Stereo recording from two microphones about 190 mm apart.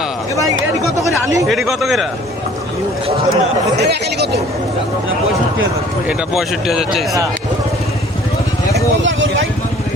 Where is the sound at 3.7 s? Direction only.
60° right (ahead or behind).